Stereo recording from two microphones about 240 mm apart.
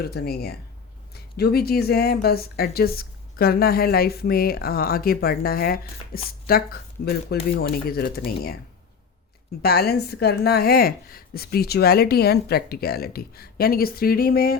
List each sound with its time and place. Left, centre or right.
0.0 s a woman's voice: left
9.6 s a woman's voice: left